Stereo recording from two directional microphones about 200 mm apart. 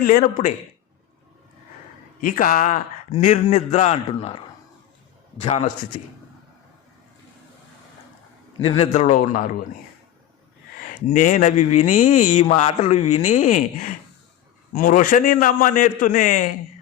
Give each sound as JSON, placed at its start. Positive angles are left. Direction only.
{"t": 0.0, "sound": "speech", "side_deg": 45}
{"t": 2.2, "sound": "speech", "side_deg": 40}
{"t": 8.6, "sound": "speech", "side_deg": 30}
{"t": 11.0, "sound": "speech", "side_deg": 40}